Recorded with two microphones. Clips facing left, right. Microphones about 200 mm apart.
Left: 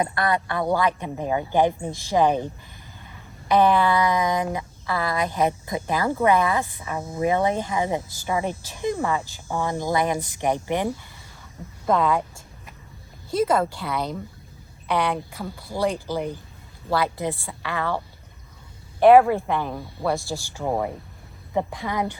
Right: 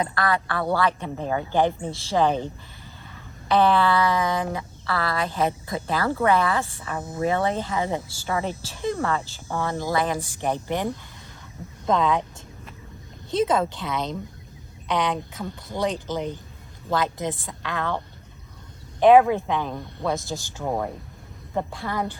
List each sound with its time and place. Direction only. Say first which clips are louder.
0.0 s speech: left 1 dB; 20° left (ahead or behind)
3.5 s speech: left 1 dB; 15° left (ahead or behind)
13.3 s speech: left 1 dB; 5° left (ahead or behind)
20.1 s speech: left 1 dB; 15° right (ahead or behind)
20.6 s speech: left 2 dB; 5° left (ahead or behind)